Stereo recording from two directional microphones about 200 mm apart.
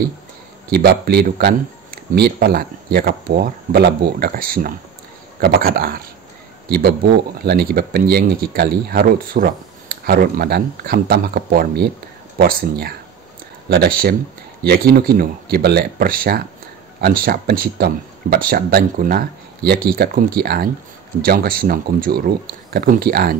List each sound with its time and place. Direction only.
0.7 s speech: 55° right (ahead or behind)
7.4 s speech: 50° right (ahead or behind)